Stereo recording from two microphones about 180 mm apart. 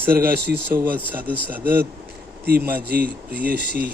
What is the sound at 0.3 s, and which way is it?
Speech, 65° right (ahead or behind).